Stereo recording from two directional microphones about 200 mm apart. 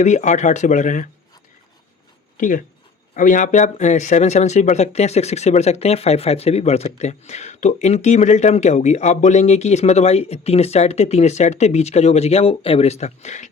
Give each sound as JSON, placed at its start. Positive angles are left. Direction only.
{"t": 0.0, "sound": "speech", "side_deg": 35}
{"t": 2.4, "sound": "speech", "side_deg": 40}